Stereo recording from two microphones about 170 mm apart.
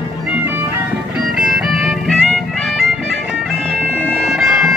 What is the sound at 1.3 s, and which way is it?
Music, 5° right (ahead or behind).